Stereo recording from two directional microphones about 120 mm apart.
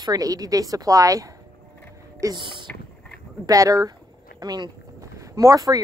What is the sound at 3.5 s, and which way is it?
A woman's voice, 30° right (ahead or behind).